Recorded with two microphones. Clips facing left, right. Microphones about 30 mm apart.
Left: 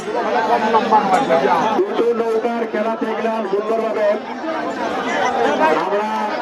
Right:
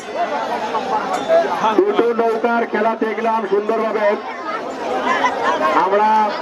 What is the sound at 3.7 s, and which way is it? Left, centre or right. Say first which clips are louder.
Speech: left 2 dB; centre.